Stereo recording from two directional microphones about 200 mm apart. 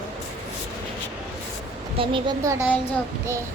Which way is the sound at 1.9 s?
25° right (ahead or behind).